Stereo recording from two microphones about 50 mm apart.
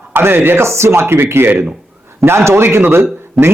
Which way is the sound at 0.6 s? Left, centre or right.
Right.